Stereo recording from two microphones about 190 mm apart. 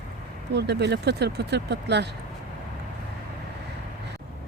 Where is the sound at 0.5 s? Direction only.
65° right (ahead or behind).